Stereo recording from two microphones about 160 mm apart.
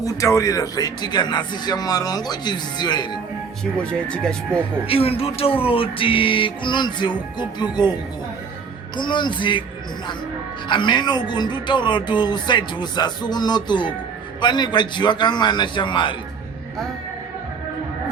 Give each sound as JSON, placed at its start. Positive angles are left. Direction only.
{"t": 0.0, "sound": "speech", "side_deg": 20}
{"t": 3.8, "sound": "speech", "side_deg": 5}
{"t": 4.9, "sound": "music", "side_deg": 35}
{"t": 9.0, "sound": "speech", "side_deg": 30}
{"t": 10.7, "sound": "speech", "side_deg": 30}